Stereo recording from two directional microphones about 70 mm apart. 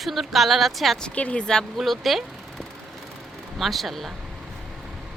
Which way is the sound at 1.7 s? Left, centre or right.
Centre.